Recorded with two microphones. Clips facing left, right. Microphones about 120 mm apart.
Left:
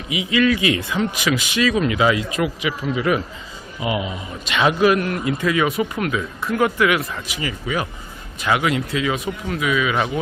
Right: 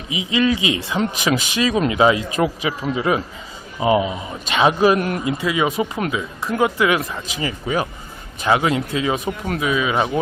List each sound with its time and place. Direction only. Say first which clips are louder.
0.1 s speech: left 1 dB; 25° right (ahead or behind)
0.9 s a man's voice: right 1 dB; 35° right (ahead or behind)
4.9 s a man's voice: right 1 dB; 40° right (ahead or behind)
5.4 s speech: left 1 dB; 20° right (ahead or behind)